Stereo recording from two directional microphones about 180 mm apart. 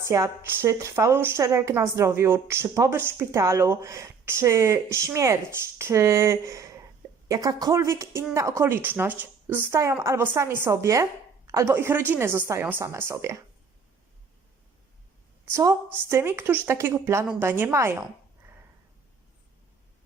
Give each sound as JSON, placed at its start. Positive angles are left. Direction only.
{"t": 0.1, "sound": "a woman's voice", "side_deg": -15}
{"t": 15.5, "sound": "a woman's voice", "side_deg": -15}